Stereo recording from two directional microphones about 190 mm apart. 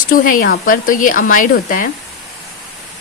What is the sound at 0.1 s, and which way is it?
Speech, 45° left (ahead or behind).